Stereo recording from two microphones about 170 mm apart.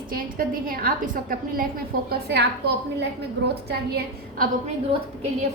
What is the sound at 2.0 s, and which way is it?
A woman's voice, 80° right.